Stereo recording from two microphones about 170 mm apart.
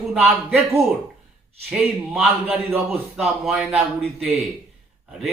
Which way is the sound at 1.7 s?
5° right (ahead or behind).